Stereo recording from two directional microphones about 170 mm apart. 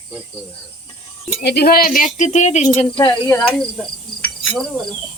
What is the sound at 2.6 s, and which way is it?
Speech, 25° left (ahead or behind).